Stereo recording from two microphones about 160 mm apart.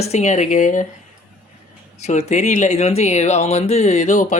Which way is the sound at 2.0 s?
45° left (ahead or behind).